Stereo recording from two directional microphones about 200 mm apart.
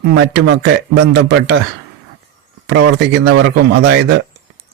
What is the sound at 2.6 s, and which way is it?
Speech, 60° right (ahead or behind).